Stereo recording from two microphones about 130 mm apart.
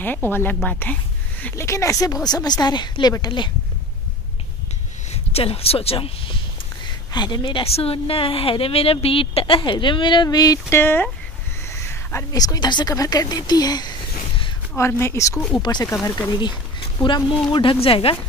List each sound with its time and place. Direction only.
0.0 s a woman's voice: 15° left (ahead or behind); by 3.5 s 35° left (ahead or behind)
5.1 s a woman's voice: 50° left (ahead or behind); by 13.9 s 30° left (ahead or behind)
14.8 s speech: 20° left (ahead or behind)
15.5 s a woman's voice: 35° left (ahead or behind)
15.8 s speech: 20° left (ahead or behind)
16.3 s a woman's voice: 35° left (ahead or behind)